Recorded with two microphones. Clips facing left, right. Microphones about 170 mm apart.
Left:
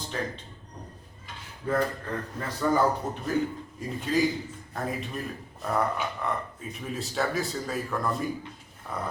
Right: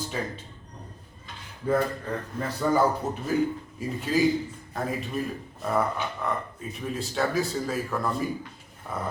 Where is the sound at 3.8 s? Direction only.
5° right (ahead or behind).